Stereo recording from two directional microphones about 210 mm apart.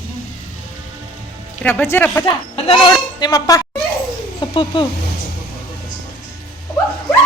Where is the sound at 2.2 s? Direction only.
25° left (ahead or behind).